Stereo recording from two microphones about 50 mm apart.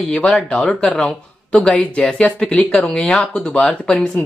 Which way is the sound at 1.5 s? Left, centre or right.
Left.